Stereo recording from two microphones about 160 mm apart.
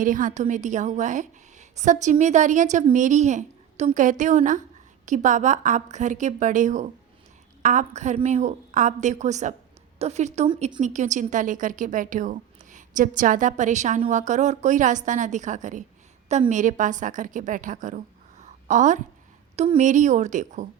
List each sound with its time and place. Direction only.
0.0 s a woman's voice: 55° right (ahead or behind)